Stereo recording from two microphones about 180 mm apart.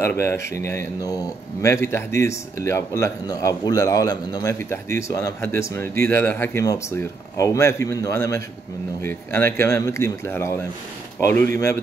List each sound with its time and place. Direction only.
0.0 s a man's voice: 15° left (ahead or behind)